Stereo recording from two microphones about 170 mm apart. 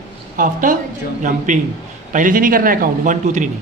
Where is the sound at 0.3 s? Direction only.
50° right (ahead or behind).